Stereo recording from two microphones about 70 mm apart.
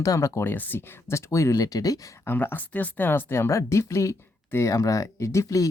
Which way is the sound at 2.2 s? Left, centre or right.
Left.